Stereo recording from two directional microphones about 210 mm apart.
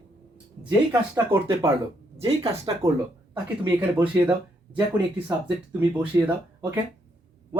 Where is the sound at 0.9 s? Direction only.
15° right (ahead or behind).